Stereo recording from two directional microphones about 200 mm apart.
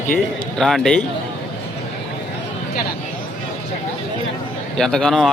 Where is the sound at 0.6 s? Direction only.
Centre (ahead or behind).